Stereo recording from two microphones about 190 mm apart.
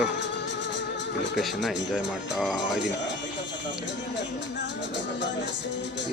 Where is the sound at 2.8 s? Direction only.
70° left (ahead or behind).